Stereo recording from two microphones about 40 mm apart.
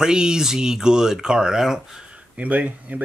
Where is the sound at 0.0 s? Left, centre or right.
Centre.